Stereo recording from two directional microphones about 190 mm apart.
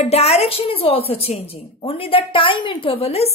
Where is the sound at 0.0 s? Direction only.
35° left (ahead or behind).